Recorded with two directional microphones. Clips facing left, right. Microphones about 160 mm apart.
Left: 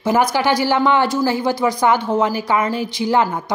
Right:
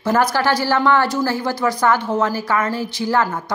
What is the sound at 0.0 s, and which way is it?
A woman's voice, 10° left (ahead or behind).